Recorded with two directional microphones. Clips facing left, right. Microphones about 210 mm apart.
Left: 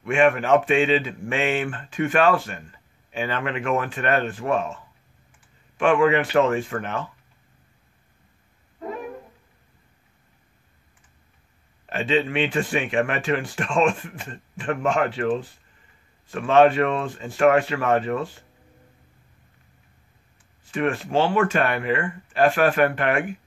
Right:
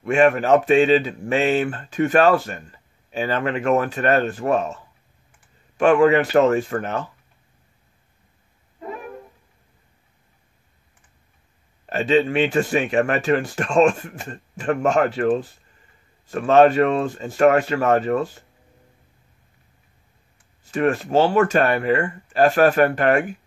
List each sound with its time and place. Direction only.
0.0 s a man's voice: 40° right (ahead or behind)
5.8 s a man's voice: 40° right (ahead or behind)
11.8 s a man's voice: 40° right (ahead or behind)
20.7 s a man's voice: 40° right (ahead or behind)